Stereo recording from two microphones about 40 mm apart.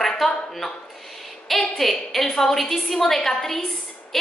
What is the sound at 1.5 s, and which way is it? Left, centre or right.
A woman's voice, centre.